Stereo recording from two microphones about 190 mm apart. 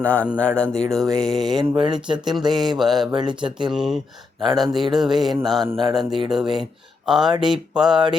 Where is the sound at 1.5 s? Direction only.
25° right (ahead or behind).